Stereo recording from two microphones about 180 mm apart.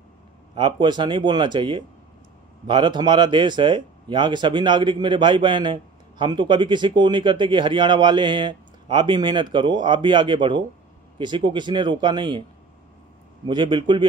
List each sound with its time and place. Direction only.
0.6 s speech: 25° right (ahead or behind)
13.5 s speech: 25° right (ahead or behind)